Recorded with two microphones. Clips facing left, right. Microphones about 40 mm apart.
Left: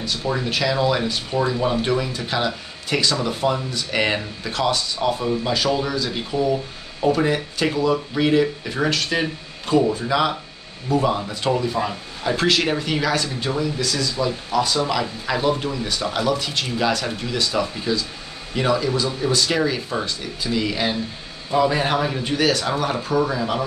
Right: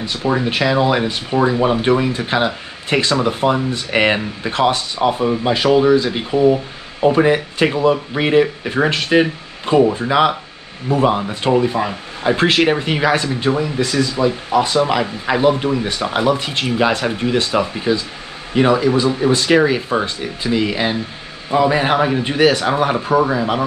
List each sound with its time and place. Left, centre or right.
0.0 s speech: right